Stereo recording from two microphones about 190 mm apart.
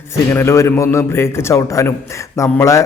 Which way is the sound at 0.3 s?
15° left (ahead or behind).